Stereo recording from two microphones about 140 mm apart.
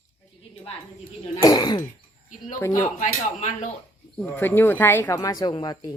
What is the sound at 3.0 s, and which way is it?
Speech, 60° left (ahead or behind).